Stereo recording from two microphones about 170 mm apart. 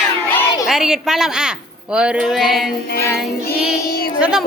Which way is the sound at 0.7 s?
Centre (ahead or behind).